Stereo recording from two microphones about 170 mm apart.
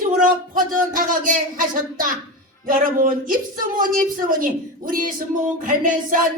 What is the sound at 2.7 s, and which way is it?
A woman's voice, 55° right (ahead or behind).